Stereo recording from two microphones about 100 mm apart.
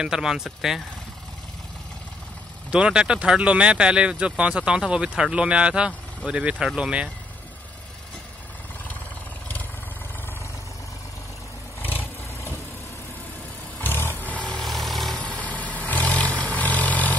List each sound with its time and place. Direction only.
0.0 s speech: 5° right (ahead or behind)
2.7 s speech: 10° right (ahead or behind)
11.8 s vehicle: 20° left (ahead or behind)
13.7 s vehicle: 20° left (ahead or behind); by 15.1 s centre (ahead or behind)
15.2 s vehicle: 10° left (ahead or behind)